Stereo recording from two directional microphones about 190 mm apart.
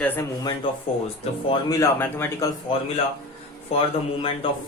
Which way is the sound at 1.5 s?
20° left (ahead or behind).